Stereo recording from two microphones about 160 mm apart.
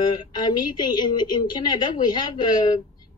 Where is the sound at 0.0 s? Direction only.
25° left (ahead or behind).